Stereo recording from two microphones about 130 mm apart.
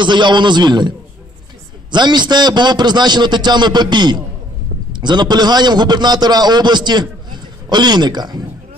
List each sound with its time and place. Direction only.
0.0 s a man's voice: 35° right (ahead or behind)